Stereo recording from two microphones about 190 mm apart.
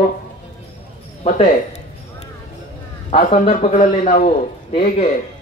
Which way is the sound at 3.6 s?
35° left (ahead or behind).